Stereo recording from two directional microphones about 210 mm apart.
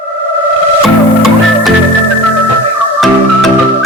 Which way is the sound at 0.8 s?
Centre (ahead or behind).